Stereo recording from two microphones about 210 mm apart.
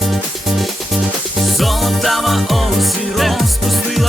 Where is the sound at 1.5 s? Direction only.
Centre (ahead or behind).